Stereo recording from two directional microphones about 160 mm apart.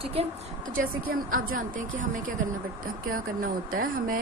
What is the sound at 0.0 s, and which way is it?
Speech, 40° right (ahead or behind).